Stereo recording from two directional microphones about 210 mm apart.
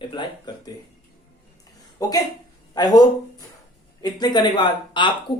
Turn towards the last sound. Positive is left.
turn(degrees=20)  # may be behind; listen again after turning